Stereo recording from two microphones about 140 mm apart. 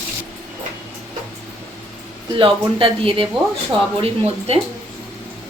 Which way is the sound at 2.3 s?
40° right (ahead or behind).